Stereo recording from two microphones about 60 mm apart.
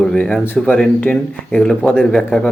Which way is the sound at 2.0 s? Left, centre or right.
Centre.